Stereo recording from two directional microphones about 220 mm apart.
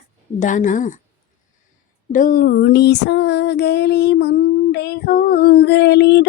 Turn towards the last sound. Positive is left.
turn(degrees=50)  # may be behind; listen again after turning